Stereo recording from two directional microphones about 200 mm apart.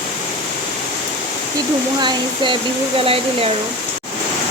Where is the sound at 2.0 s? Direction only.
25° right (ahead or behind).